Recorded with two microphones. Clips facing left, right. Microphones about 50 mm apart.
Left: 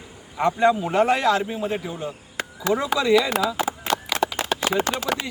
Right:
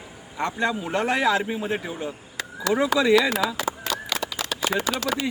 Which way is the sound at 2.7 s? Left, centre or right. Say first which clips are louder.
Left 1 dB; left.